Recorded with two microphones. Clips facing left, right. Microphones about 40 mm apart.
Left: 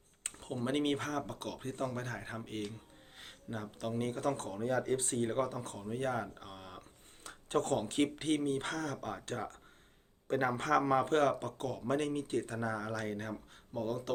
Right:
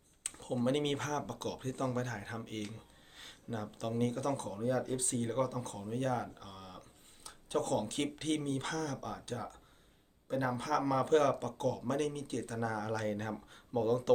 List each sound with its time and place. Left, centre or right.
0.3 s speech: centre
4.0 s speech: centre
4.4 s a man's voice: left
5.7 s speech: centre
7.3 s a sound: left
7.8 s speech: left
9.2 s a man's voice: left
10.8 s speech: left; by 13.0 s centre
13.1 s speech: centre